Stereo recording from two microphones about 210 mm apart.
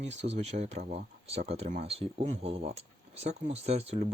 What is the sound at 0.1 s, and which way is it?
Speech, 30° right (ahead or behind).